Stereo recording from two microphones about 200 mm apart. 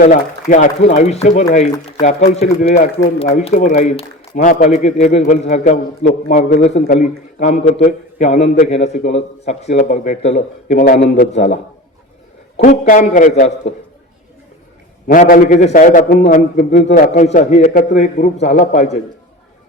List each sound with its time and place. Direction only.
0.0 s a man's voice: 40° left (ahead or behind)
11.3 s a man's voice: 35° left (ahead or behind)
15.0 s a man's voice: 45° left (ahead or behind)